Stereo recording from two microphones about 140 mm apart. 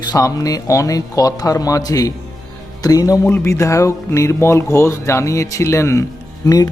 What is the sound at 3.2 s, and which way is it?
Speech, 15° left (ahead or behind).